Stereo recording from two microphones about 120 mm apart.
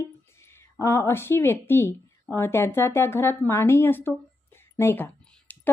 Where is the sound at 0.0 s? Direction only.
20° left (ahead or behind).